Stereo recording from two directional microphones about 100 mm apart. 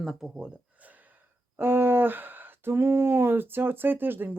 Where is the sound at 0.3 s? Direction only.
15° right (ahead or behind).